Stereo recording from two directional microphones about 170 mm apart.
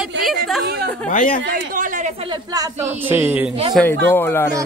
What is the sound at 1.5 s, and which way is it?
Speech, 50° right (ahead or behind).